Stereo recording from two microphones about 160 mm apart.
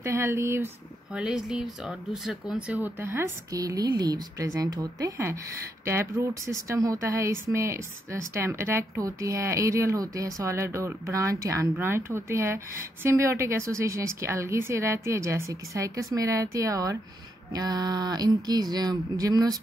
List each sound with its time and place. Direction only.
0.0 s speech: 15° right (ahead or behind)
1.1 s speech: 5° right (ahead or behind); by 19.6 s 25° right (ahead or behind)